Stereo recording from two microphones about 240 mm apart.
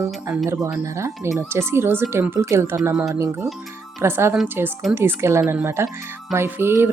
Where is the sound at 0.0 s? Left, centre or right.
Centre.